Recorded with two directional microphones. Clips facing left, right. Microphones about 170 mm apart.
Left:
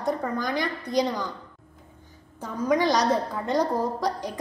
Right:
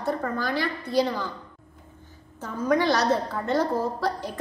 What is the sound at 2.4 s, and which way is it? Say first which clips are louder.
A woman's voice: even; 10° left (ahead or behind).